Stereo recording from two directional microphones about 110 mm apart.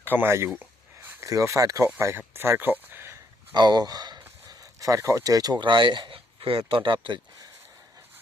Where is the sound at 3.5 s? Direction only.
40° right (ahead or behind).